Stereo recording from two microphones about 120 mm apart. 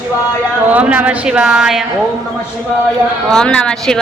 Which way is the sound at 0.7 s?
10° right (ahead or behind).